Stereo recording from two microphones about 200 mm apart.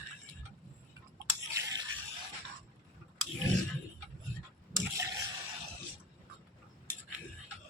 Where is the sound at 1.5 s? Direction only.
15° right (ahead or behind).